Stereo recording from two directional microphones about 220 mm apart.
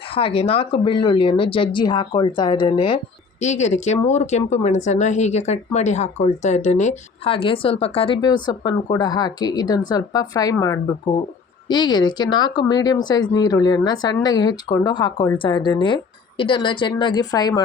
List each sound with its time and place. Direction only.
0.1 s speech: 25° left (ahead or behind)